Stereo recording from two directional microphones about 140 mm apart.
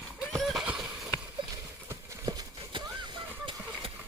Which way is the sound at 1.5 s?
25° right (ahead or behind).